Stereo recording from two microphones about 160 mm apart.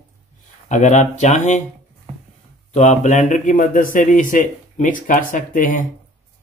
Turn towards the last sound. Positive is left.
turn(degrees=55)  # may be behind; listen again after turning